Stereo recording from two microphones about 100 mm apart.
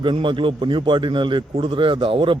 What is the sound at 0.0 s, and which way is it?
A man's voice, 55° right (ahead or behind).